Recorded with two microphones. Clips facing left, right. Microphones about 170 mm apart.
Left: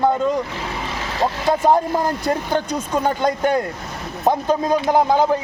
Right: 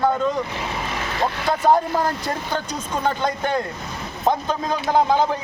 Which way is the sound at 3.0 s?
10° left (ahead or behind).